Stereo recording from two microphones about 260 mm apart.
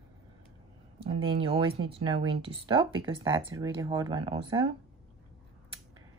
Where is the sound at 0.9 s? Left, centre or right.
Right.